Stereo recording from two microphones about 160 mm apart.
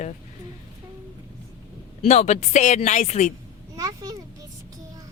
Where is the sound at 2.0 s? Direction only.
45° left (ahead or behind).